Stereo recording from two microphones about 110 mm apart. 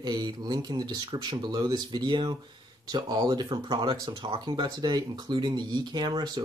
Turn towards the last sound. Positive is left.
turn(degrees=-40)  # may be behind; listen again after turning